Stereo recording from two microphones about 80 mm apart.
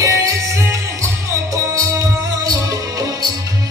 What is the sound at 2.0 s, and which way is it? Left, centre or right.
Music, right.